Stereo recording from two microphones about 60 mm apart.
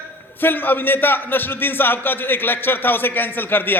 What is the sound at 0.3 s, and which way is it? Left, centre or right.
A man's voice, left.